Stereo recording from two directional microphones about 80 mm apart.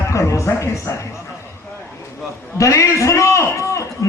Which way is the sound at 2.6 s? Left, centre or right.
Left.